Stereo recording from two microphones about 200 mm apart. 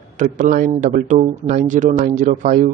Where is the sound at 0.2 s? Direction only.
40° right (ahead or behind).